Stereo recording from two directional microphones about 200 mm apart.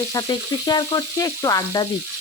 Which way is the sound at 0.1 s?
20° left (ahead or behind).